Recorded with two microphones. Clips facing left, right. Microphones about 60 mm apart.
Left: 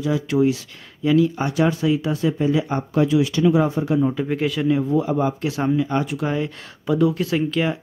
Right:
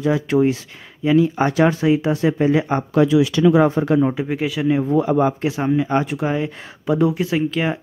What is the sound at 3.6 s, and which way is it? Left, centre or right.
Speech, right.